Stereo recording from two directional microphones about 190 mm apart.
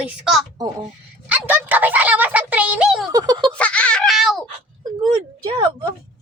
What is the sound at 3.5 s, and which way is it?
Baby laughter, 5° left (ahead or behind).